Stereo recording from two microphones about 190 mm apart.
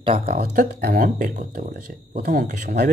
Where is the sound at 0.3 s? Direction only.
55° right (ahead or behind).